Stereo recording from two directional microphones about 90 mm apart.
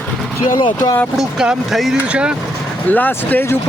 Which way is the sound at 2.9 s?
20° left (ahead or behind).